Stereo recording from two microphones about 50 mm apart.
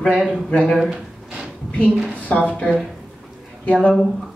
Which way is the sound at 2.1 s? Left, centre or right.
Left.